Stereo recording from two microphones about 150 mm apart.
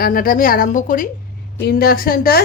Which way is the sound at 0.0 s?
75° left (ahead or behind).